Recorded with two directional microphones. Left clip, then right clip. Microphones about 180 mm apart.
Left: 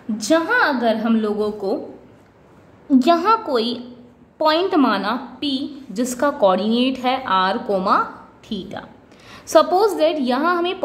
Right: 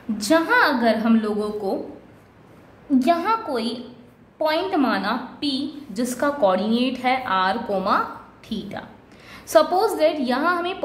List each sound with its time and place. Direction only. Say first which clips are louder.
0.2 s a woman's voice: left 1 dB; 15° left (ahead or behind)
3.0 s a woman's voice: left 4 dB; 25° left (ahead or behind)